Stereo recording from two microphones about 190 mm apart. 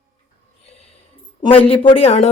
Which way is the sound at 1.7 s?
30° left (ahead or behind).